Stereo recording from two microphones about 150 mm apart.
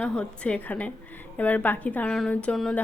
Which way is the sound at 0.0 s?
5° left (ahead or behind).